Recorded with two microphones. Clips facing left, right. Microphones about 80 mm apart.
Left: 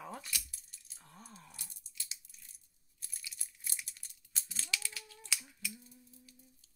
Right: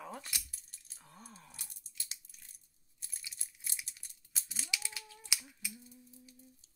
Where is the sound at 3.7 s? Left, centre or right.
Centre.